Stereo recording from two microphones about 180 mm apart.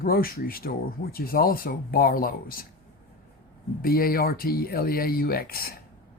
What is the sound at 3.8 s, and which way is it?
Speech, 55° left (ahead or behind).